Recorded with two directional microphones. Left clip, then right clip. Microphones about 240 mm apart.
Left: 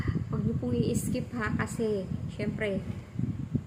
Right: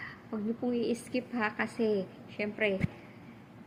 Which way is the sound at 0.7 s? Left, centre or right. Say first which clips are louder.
Left 1 dB; centre.